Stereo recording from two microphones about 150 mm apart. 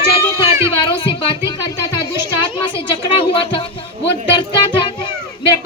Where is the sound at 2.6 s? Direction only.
35° left (ahead or behind).